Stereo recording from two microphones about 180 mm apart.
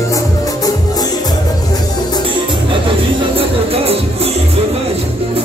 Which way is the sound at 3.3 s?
35° right (ahead or behind).